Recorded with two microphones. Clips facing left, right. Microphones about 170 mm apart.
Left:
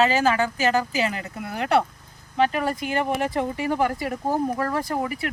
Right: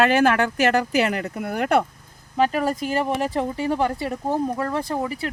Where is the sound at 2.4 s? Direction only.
40° right (ahead or behind).